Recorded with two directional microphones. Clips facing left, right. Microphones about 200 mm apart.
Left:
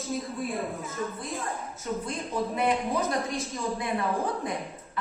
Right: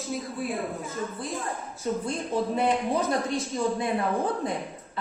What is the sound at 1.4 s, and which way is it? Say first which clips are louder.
A woman's voice: right 3 dB; 30° right (ahead or behind).